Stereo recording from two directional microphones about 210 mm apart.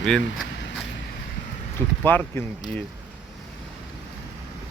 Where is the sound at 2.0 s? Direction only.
10° left (ahead or behind).